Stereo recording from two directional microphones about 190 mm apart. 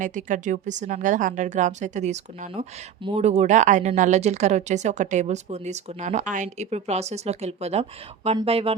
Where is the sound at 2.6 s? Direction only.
30° right (ahead or behind).